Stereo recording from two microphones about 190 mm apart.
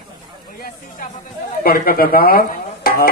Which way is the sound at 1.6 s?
50° left (ahead or behind).